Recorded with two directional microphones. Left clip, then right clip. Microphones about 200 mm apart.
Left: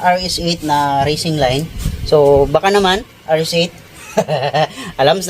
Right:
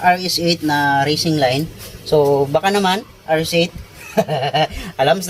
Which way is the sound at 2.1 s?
25° left (ahead or behind).